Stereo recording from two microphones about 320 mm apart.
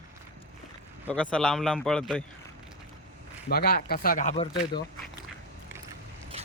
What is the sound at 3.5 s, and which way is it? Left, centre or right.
Speech, left.